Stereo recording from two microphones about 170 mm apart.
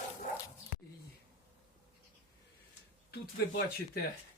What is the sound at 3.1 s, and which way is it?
Speech, 65° left (ahead or behind).